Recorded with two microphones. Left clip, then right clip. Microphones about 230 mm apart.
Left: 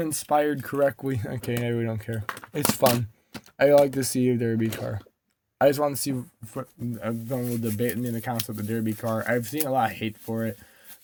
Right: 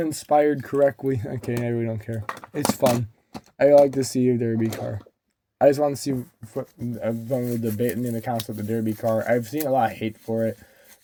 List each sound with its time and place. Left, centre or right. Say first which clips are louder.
0.0 s speech: right 4 dB; left